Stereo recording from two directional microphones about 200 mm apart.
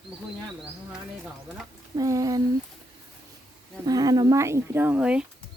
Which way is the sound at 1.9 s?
15° right (ahead or behind).